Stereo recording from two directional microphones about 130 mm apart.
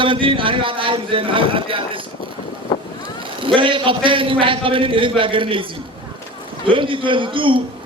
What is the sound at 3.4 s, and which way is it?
A man's voice, 40° right (ahead or behind).